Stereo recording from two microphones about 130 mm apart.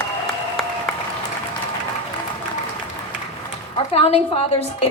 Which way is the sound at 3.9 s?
50° left (ahead or behind).